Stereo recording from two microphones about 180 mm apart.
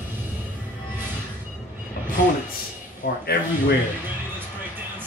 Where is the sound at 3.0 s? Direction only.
70° left (ahead or behind).